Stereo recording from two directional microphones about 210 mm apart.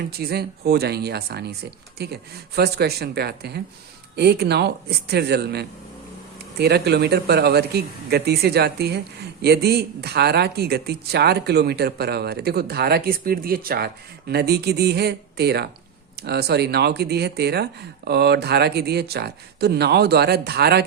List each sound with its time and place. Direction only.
0.2 s speech: 50° right (ahead or behind)